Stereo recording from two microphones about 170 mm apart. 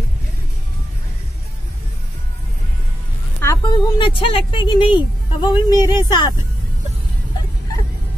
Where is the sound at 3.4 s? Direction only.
20° left (ahead or behind).